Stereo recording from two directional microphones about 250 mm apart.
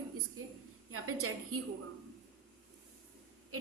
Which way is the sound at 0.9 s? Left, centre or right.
Right.